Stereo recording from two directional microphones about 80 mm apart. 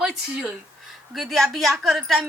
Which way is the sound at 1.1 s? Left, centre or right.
Centre.